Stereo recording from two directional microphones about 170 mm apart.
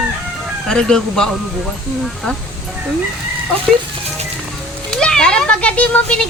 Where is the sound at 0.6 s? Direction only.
5° left (ahead or behind).